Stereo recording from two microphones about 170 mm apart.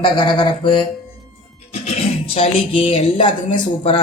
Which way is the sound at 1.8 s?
35° left (ahead or behind).